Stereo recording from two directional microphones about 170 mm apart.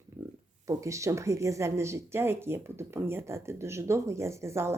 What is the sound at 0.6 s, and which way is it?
Speech, 20° right (ahead or behind).